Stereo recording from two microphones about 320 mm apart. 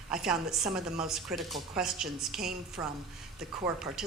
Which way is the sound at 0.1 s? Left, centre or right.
Centre.